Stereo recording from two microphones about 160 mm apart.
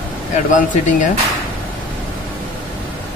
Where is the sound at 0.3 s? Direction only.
50° left (ahead or behind).